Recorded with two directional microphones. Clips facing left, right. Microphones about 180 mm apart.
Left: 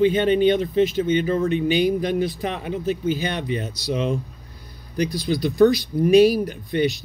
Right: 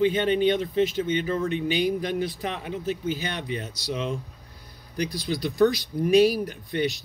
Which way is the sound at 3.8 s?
65° left (ahead or behind).